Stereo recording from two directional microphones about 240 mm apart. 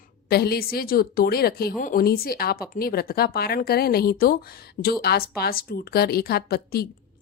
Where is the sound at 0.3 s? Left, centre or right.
Left.